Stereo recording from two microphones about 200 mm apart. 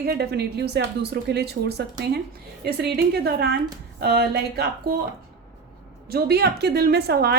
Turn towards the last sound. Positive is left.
turn(degrees=-55)  # may be behind; listen again after turning